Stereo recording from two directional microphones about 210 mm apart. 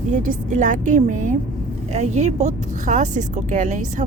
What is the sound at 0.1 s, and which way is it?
Speech, 35° right (ahead or behind).